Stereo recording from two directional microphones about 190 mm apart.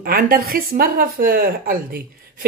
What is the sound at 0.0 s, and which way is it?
A woman's voice, 50° right (ahead or behind).